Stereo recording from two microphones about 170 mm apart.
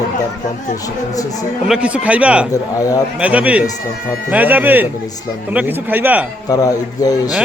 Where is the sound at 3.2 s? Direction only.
10° right (ahead or behind).